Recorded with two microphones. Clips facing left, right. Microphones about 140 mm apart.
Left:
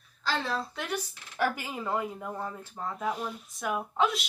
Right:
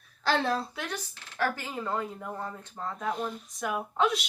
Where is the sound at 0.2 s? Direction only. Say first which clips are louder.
Right 5 dB; 65° right (ahead or behind).